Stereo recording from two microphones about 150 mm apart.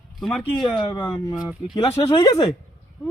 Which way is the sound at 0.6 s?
30° left (ahead or behind).